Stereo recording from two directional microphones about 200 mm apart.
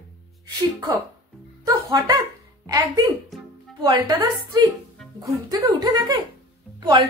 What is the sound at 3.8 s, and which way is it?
Speech, 25° right (ahead or behind).